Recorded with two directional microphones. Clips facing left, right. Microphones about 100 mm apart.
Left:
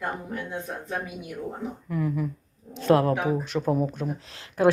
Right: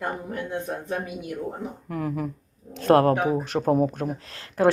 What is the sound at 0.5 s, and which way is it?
Speech, 60° right (ahead or behind).